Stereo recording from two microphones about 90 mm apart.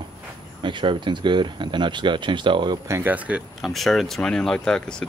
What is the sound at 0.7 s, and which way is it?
Speech, 60° right (ahead or behind).